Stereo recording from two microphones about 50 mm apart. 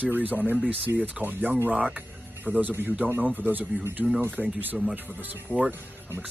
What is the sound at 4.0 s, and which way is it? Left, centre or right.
Speech, right.